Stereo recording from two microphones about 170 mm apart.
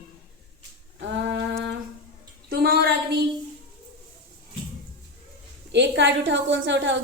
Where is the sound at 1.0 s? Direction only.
90° right.